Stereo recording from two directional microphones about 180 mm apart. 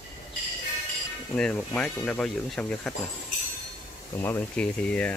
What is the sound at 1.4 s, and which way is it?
Speech, 5° left (ahead or behind).